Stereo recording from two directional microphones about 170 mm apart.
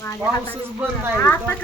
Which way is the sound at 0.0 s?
15° left (ahead or behind).